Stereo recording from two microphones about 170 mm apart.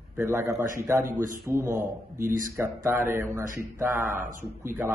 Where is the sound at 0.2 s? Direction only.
15° right (ahead or behind).